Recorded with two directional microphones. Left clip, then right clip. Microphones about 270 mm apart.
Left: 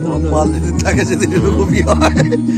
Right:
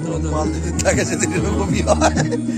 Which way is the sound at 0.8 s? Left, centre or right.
Centre.